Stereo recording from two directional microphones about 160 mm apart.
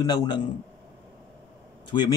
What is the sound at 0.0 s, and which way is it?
Speech, 25° left (ahead or behind).